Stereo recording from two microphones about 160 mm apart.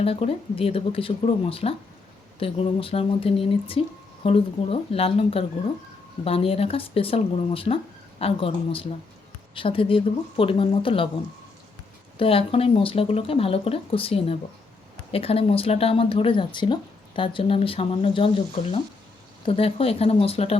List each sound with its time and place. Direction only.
0.0 s speech: 40° left (ahead or behind)
12.1 s speech: 35° left (ahead or behind)